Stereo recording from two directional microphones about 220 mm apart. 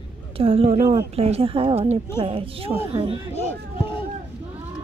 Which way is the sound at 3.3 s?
30° left (ahead or behind).